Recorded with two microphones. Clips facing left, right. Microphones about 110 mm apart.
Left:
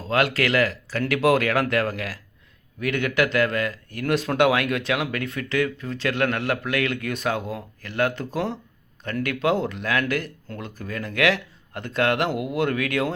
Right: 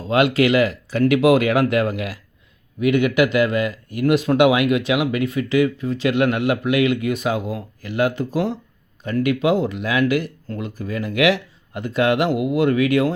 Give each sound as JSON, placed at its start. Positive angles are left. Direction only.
{"t": 0.1, "sound": "speech", "side_deg": -20}